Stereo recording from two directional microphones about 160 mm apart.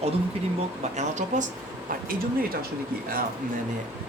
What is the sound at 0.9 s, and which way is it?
Speech, 50° right (ahead or behind).